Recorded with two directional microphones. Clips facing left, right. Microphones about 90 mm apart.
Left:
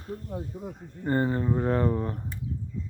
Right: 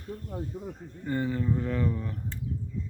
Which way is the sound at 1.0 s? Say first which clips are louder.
Left 3 dB; 45° left (ahead or behind).